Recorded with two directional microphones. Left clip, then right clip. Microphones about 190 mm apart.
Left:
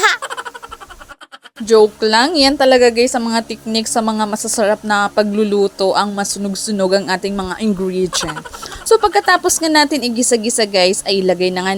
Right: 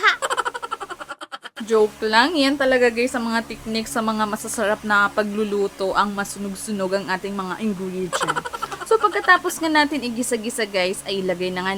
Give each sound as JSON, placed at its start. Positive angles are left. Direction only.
{"t": 0.2, "sound": "a sound", "side_deg": 0}
{"t": 1.6, "sound": "a woman's voice", "side_deg": 35}
{"t": 8.2, "sound": "speech", "side_deg": 0}
{"t": 8.9, "sound": "a woman's voice", "side_deg": 35}